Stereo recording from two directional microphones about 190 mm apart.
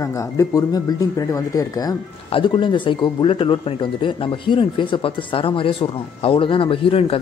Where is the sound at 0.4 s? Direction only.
20° left (ahead or behind).